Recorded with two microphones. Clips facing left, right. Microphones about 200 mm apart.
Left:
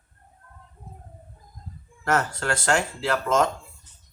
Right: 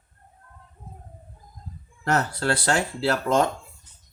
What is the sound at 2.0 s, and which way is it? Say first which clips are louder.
Speech: right 1 dB; 35° right (ahead or behind).